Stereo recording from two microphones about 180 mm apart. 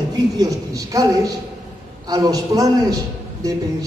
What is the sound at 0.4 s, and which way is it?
A man's voice, 20° right (ahead or behind).